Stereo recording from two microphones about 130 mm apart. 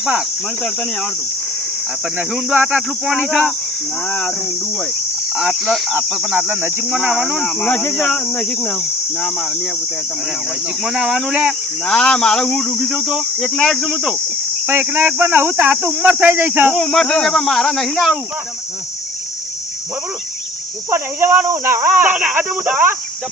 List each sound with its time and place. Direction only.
0.0 s speech: 5° right (ahead or behind)
0.6 s cricket: 5° left (ahead or behind)
2.1 s speech: 10° right (ahead or behind)
4.0 s cricket: 10° left (ahead or behind)
5.3 s speech: 5° right (ahead or behind)
6.3 s speech: 15° right (ahead or behind)
7.4 s cricket: 10° left (ahead or behind)
10.8 s speech: 5° right (ahead or behind)
11.9 s speech: 10° left (ahead or behind)
14.7 s speech: 15° right (ahead or behind)
16.7 s speech: 5° left (ahead or behind)
20.9 s speech: 15° right (ahead or behind)